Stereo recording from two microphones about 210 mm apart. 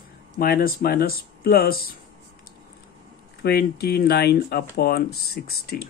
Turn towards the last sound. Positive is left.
turn(degrees=50)  # may be behind; listen again after turning